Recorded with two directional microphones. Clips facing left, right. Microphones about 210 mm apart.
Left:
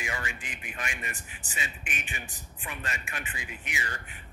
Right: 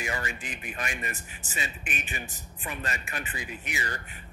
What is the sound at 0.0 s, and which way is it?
Speech, 40° right (ahead or behind).